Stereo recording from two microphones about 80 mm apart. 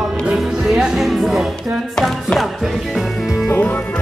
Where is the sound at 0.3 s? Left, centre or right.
Centre.